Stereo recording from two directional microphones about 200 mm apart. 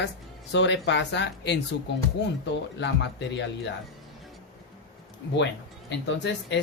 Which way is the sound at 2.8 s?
60° left (ahead or behind).